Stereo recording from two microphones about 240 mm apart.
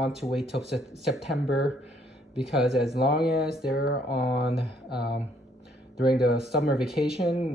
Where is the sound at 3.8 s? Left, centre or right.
Left.